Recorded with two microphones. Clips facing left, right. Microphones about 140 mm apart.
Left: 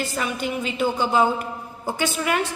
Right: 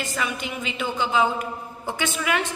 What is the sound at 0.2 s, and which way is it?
A woman's voice, 40° left (ahead or behind).